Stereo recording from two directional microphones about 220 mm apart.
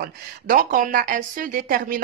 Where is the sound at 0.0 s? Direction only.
40° right (ahead or behind).